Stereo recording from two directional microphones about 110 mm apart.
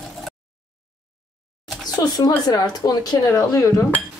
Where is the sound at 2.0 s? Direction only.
35° left (ahead or behind).